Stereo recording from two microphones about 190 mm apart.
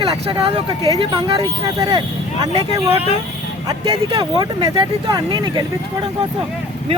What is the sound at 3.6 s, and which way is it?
Speech, 30° right (ahead or behind).